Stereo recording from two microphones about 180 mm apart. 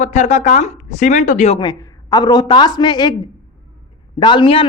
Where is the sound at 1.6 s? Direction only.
20° left (ahead or behind).